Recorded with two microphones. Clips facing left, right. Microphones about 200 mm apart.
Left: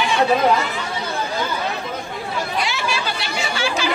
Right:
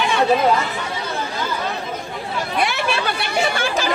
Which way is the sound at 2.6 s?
55° right (ahead or behind).